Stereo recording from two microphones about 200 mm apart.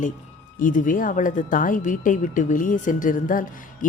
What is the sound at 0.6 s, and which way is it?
Speech, 40° left (ahead or behind).